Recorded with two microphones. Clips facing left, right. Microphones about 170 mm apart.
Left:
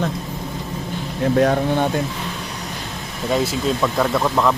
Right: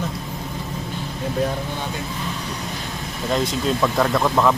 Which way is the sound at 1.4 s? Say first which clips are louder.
Left 8 dB; 70° left (ahead or behind).